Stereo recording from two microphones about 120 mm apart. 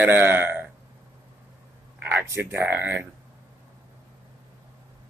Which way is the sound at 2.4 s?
15° right (ahead or behind).